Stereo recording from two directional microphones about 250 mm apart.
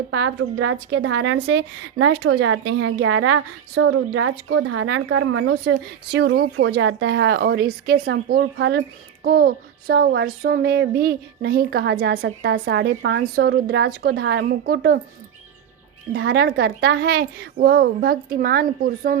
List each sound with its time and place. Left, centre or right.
0.1 s speech: right
9.2 s child singing: right
16.1 s child singing: right